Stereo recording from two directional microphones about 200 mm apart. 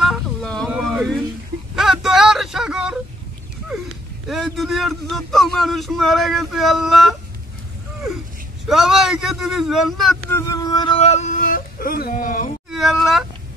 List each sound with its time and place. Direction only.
0.0 s a sound: centre (ahead or behind)
4.3 s speech: centre (ahead or behind)
8.6 s a man's voice: centre (ahead or behind)
10.3 s speech: 15° left (ahead or behind); by 12.5 s 45° left (ahead or behind)
12.7 s speech: centre (ahead or behind)